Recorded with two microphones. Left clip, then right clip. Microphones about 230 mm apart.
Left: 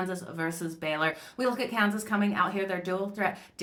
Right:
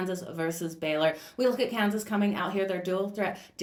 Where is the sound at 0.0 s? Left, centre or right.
Centre.